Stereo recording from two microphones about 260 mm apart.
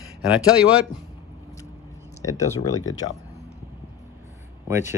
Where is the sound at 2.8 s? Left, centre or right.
Left.